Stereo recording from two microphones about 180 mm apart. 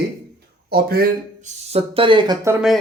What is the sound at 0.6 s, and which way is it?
Speech, 60° right (ahead or behind).